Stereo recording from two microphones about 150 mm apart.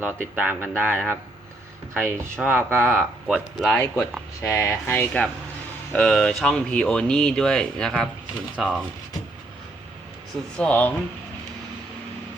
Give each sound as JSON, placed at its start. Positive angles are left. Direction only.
{"t": 0.0, "sound": "speech", "side_deg": -10}
{"t": 3.2, "sound": "speech", "side_deg": -5}
{"t": 3.8, "sound": "speech", "side_deg": 20}
{"t": 10.6, "sound": "speech", "side_deg": 10}